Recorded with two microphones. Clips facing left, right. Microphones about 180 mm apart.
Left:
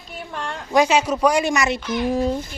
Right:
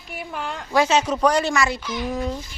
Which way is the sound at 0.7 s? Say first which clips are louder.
Left 2 dB; 15° left (ahead or behind).